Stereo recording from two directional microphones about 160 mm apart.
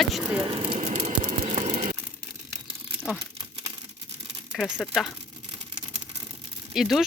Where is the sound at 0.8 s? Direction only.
45° right (ahead or behind).